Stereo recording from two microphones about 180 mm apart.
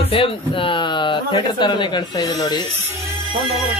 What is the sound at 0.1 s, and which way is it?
Speech, 30° left (ahead or behind).